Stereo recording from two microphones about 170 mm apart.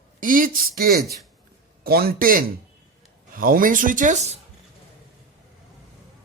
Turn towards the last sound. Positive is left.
turn(degrees=-45)  # may be behind; listen again after turning